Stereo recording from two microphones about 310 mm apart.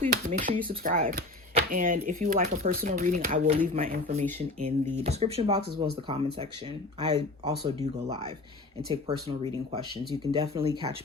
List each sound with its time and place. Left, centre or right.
0.0 s speech: right
7.0 s speech: centre
8.9 s speech: centre